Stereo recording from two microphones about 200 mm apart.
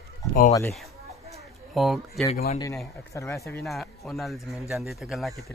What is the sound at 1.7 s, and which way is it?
Speech, centre (ahead or behind).